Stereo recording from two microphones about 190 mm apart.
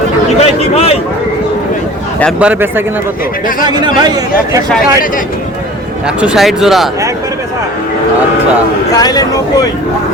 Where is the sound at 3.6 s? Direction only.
20° right (ahead or behind).